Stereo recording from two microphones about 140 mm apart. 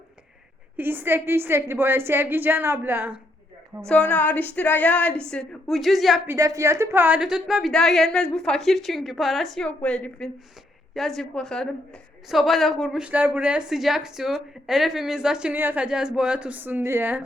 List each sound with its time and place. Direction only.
0.8 s a woman's voice: 15° right (ahead or behind)
3.8 s a woman's voice: 10° left (ahead or behind)
6.2 s a woman's voice: 20° right (ahead or behind)
7.2 s a woman's voice: 5° right (ahead or behind)